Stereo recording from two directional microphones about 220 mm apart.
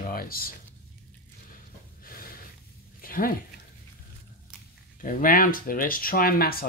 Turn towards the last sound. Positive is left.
turn(degrees=40)  # may be behind; listen again after turning